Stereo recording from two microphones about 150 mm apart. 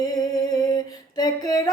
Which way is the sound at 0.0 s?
25° left (ahead or behind).